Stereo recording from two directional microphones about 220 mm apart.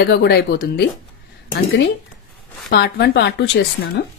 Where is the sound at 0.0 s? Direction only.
45° left (ahead or behind).